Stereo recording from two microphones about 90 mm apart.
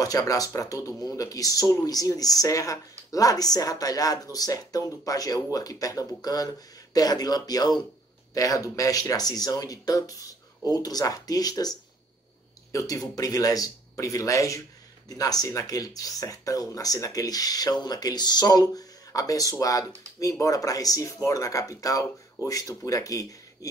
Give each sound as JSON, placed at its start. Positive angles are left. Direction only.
{"t": 0.0, "sound": "speech", "side_deg": 40}